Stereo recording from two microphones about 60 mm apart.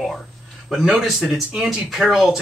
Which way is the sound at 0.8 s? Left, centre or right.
Centre.